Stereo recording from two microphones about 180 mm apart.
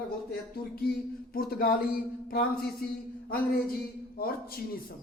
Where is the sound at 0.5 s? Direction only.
55° left (ahead or behind).